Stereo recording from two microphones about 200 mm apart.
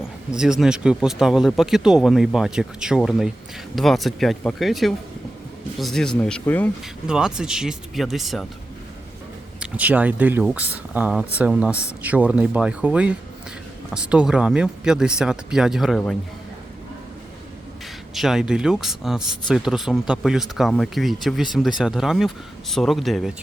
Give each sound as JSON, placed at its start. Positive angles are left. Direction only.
{"t": 0.3, "sound": "speech", "side_deg": -5}
{"t": 7.1, "sound": "speech", "side_deg": -5}
{"t": 9.6, "sound": "speech", "side_deg": -5}
{"t": 18.1, "sound": "speech", "side_deg": 0}